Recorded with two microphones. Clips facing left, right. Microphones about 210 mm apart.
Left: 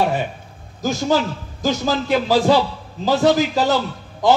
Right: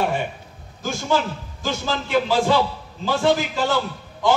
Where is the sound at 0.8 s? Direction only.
40° left (ahead or behind).